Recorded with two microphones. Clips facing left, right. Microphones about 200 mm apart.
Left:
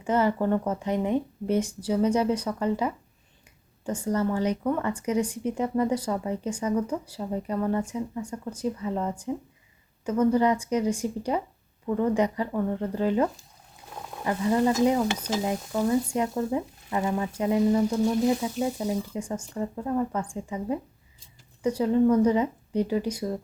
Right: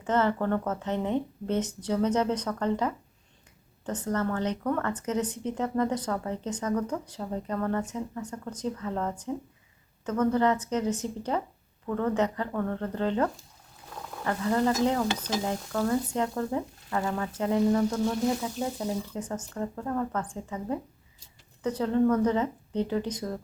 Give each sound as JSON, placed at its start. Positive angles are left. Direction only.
{"t": 0.0, "sound": "speech", "side_deg": 10}
{"t": 17.0, "sound": "speech", "side_deg": 20}
{"t": 17.3, "sound": "speech", "side_deg": 10}